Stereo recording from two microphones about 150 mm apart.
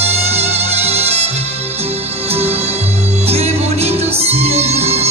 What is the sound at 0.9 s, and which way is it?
Music, 45° right (ahead or behind).